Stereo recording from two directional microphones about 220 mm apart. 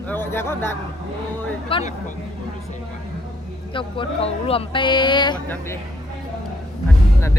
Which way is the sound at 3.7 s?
25° left (ahead or behind).